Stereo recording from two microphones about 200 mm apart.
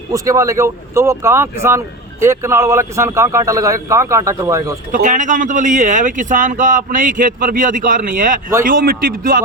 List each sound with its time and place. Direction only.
0.1 s a man's voice: 15° right (ahead or behind)
4.9 s a man's voice: 40° right (ahead or behind)